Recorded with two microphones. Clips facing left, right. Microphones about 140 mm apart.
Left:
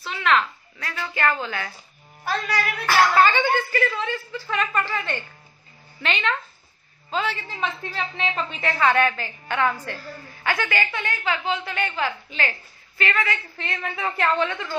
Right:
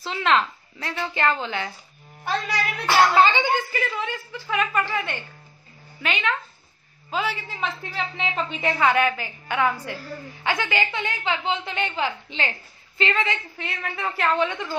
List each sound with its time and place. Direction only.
0.0 s a woman's voice: 30° right (ahead or behind)
13.6 s a woman's voice: 5° right (ahead or behind)
14.5 s a woman's voice: 15° right (ahead or behind)